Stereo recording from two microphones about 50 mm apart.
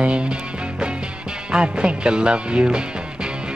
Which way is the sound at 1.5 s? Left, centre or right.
Centre.